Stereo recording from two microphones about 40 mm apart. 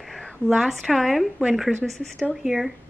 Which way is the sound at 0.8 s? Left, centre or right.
Centre.